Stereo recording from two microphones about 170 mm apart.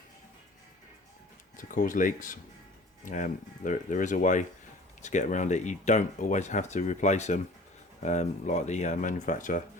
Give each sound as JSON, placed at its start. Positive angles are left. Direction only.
{"t": 1.5, "sound": "speech", "side_deg": 50}